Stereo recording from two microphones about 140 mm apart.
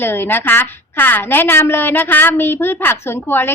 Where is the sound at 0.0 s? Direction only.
15° left (ahead or behind).